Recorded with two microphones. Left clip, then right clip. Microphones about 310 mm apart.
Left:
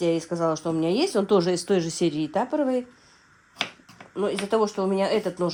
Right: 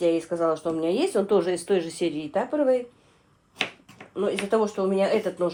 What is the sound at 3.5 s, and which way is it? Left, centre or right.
Finger snapping, centre.